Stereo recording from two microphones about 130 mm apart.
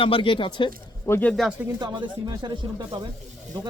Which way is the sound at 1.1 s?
15° left (ahead or behind).